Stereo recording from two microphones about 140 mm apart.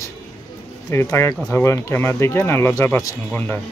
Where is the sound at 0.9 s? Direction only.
20° left (ahead or behind).